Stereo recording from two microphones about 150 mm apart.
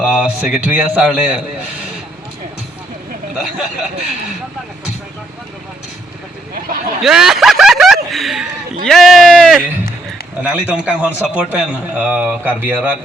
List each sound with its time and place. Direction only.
0.2 s a man's voice: 10° right (ahead or behind)
7.0 s speech: 5° right (ahead or behind)
10.4 s a man's voice: 10° right (ahead or behind)